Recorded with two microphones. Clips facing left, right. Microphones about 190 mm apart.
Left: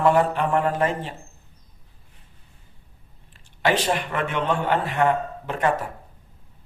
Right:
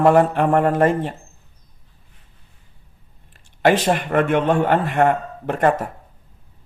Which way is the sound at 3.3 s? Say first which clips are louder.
Right 6 dB; 50° right (ahead or behind).